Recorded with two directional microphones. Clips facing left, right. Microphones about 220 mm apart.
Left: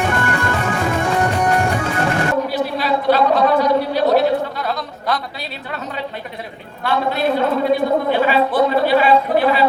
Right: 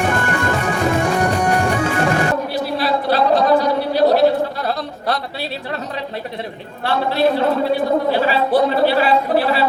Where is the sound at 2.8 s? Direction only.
35° right (ahead or behind).